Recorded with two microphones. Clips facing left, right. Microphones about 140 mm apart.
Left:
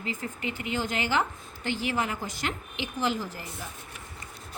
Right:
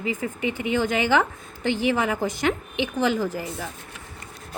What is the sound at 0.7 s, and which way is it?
Speech, 60° right (ahead or behind).